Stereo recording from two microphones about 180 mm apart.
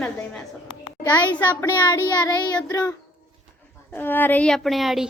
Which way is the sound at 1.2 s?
25° left (ahead or behind).